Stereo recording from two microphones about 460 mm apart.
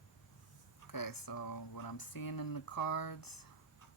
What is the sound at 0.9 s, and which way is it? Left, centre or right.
Speech, left.